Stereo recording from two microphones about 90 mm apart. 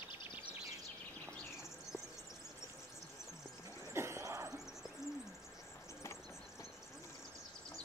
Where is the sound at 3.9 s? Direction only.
30° right (ahead or behind).